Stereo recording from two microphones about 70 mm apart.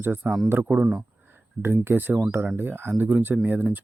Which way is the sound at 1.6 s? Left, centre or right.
Right.